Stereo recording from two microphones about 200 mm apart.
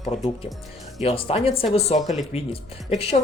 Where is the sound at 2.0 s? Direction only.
Centre (ahead or behind).